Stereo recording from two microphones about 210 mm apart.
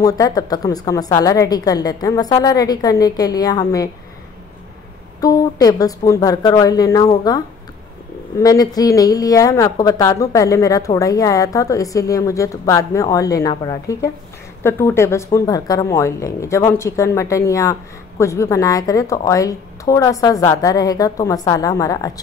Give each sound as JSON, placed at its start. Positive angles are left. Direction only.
{"t": 0.0, "sound": "speech", "side_deg": 15}
{"t": 5.2, "sound": "speech", "side_deg": 15}
{"t": 8.4, "sound": "speech", "side_deg": 15}